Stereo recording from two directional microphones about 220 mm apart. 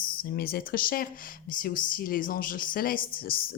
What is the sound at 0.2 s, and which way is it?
Speech, 45° left (ahead or behind).